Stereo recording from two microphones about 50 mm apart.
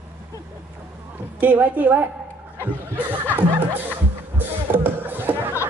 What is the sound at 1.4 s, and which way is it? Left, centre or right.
Speech, right.